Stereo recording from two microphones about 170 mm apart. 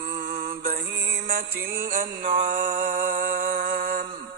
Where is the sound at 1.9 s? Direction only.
55° right (ahead or behind).